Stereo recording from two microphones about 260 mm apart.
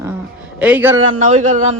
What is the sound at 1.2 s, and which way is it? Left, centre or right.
Speech, right.